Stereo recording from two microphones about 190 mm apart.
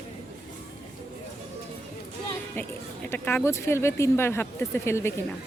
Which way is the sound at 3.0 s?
10° left (ahead or behind).